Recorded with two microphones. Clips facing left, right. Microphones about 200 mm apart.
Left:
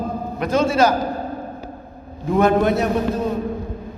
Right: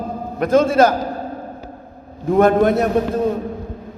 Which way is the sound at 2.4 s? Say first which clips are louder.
Right 3 dB; 50° right (ahead or behind).